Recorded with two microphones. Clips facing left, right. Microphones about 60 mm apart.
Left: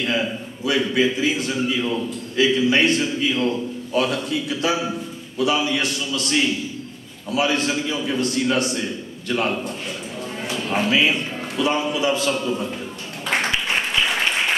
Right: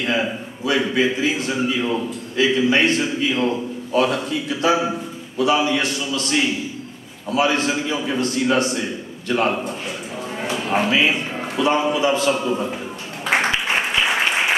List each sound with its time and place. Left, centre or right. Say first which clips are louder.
0.0 s a man's voice: right 1 dB; right
9.7 s a sound: right 2 dB; centre
10.5 s a man's voice: right 1 dB; centre
13.2 s applause: right 3 dB; centre